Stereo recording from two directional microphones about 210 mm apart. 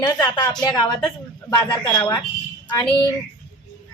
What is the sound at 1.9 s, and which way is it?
Speech, 10° left (ahead or behind).